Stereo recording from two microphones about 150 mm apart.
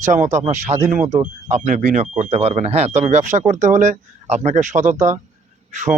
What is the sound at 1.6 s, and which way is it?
Speech, 55° right (ahead or behind).